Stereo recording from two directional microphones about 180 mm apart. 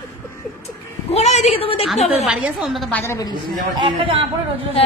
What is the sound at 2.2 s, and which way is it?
Speech, 5° right (ahead or behind).